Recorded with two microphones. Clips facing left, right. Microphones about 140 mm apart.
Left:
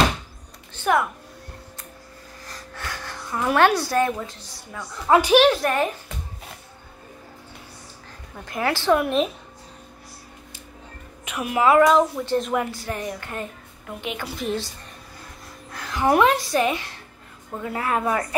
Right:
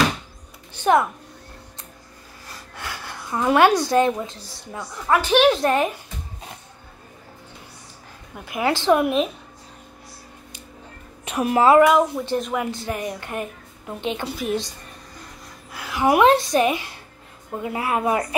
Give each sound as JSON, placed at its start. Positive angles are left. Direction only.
{"t": 0.9, "sound": "a woman's voice", "side_deg": -25}
{"t": 2.4, "sound": "a sound", "side_deg": -10}
{"t": 5.0, "sound": "a woman's voice", "side_deg": 10}
{"t": 5.5, "sound": "a woman's voice", "side_deg": -20}
{"t": 8.5, "sound": "a woman's voice", "side_deg": -15}
{"t": 11.2, "sound": "a woman's voice", "side_deg": -35}
{"t": 11.8, "sound": "speech", "side_deg": -5}
{"t": 12.9, "sound": "a woman's voice", "side_deg": -15}
{"t": 15.7, "sound": "a sound", "side_deg": -10}
{"t": 16.3, "sound": "a woman's voice", "side_deg": -20}